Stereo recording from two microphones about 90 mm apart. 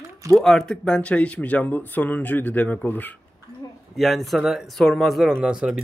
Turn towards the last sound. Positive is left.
turn(degrees=-10)  # may be behind; listen again after turning